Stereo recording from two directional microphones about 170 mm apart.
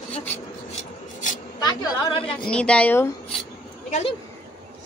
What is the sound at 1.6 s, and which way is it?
Speech, 25° left (ahead or behind).